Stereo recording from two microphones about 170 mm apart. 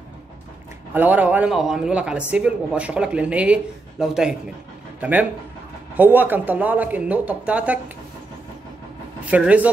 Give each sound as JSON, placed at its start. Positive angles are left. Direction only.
{"t": 0.9, "sound": "speech", "side_deg": -10}
{"t": 5.9, "sound": "speech", "side_deg": -10}
{"t": 9.3, "sound": "speech", "side_deg": -10}